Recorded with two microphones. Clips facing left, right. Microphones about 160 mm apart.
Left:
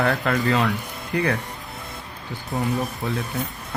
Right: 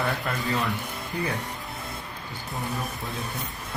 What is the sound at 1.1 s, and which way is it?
Speech, 90° left.